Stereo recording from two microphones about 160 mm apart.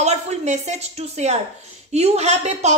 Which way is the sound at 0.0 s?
45° right (ahead or behind).